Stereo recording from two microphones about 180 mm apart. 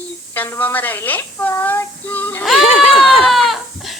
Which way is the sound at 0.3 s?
10° left (ahead or behind).